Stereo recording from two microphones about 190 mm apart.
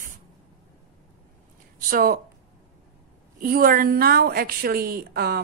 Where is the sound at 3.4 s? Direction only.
50° right (ahead or behind).